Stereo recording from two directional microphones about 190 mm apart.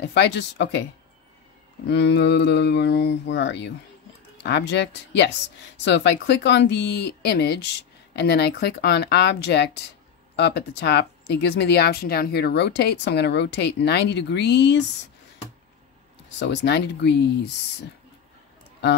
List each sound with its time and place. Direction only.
0.0 s speech: 65° left (ahead or behind)
1.9 s speech: 65° left (ahead or behind)
16.3 s speech: 65° left (ahead or behind)